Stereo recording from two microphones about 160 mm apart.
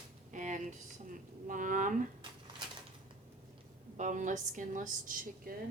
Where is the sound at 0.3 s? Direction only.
50° right (ahead or behind).